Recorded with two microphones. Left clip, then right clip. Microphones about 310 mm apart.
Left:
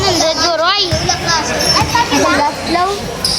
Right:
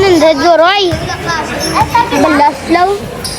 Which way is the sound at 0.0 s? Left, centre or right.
Right.